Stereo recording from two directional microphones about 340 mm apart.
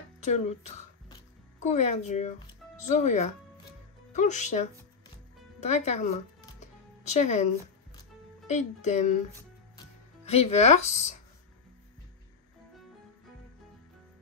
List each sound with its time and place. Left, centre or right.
0.2 s speech: centre
8.5 s speech: left
10.2 s speech: centre